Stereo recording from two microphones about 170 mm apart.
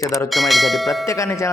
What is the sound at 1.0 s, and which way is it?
Speech, 20° left (ahead or behind).